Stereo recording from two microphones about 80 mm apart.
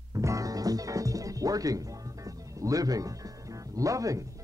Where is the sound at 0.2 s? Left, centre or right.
Right.